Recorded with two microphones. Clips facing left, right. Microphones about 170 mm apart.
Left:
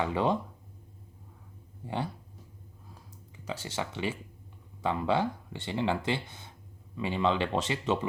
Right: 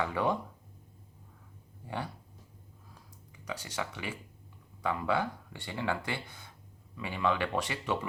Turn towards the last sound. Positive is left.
turn(degrees=25)  # may be behind; listen again after turning